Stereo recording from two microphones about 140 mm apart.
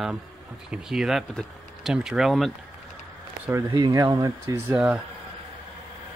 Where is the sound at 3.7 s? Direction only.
25° right (ahead or behind).